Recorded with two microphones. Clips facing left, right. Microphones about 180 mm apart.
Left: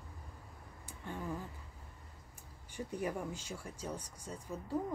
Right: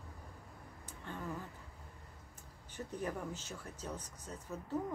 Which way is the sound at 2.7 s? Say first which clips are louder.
Left 2 dB; 10° left (ahead or behind).